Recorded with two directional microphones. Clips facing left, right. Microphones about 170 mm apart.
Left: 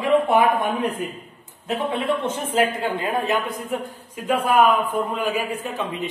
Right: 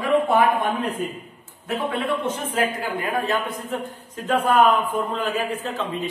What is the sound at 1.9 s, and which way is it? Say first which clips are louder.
A man's voice: left 1 dB; 25° left (ahead or behind).